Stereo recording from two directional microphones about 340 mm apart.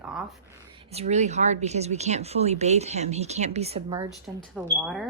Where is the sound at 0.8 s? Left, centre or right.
Centre.